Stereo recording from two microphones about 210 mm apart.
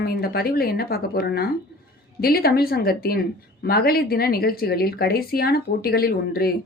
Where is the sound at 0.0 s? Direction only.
45° left (ahead or behind).